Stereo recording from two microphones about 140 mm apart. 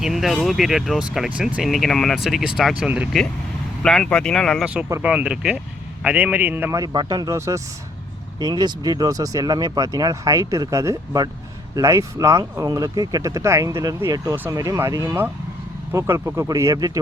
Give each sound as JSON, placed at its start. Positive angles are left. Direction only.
{"t": 0.0, "sound": "speech", "side_deg": 0}
{"t": 3.8, "sound": "speech", "side_deg": 5}
{"t": 4.6, "sound": "speech", "side_deg": -10}